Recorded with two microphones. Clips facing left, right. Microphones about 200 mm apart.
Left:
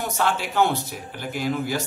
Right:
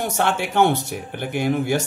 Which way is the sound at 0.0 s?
55° right (ahead or behind).